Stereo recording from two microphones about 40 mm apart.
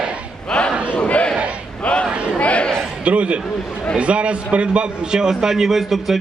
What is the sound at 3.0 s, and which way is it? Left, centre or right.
A man's voice, right.